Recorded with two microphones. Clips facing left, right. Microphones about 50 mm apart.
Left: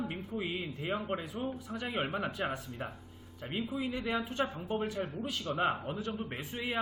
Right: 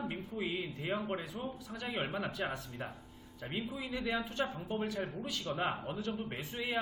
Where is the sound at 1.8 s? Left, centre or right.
Centre.